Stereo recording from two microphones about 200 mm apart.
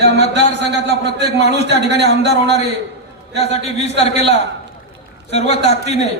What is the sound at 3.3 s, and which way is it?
Speech, 30° left (ahead or behind).